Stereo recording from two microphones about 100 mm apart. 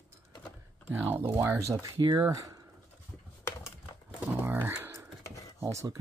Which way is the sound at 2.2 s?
35° right (ahead or behind).